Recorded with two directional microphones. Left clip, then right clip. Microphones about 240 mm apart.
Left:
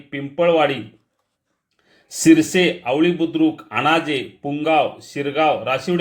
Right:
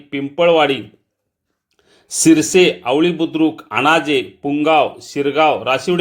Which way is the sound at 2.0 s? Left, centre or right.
Right.